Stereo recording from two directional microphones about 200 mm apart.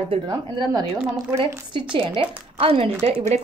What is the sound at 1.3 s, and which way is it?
Speech, 25° right (ahead or behind).